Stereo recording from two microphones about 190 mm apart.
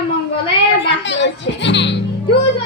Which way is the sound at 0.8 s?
70° left (ahead or behind).